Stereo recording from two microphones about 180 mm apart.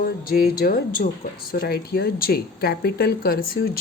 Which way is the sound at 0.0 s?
55° left (ahead or behind).